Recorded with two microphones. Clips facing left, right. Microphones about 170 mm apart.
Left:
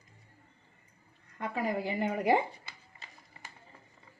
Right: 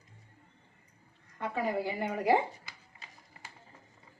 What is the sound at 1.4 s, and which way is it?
A woman's voice, 15° left (ahead or behind).